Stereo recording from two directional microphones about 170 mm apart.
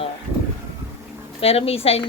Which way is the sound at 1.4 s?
35° left (ahead or behind).